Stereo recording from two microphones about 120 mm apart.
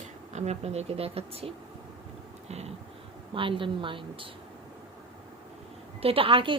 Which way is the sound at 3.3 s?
45° right (ahead or behind).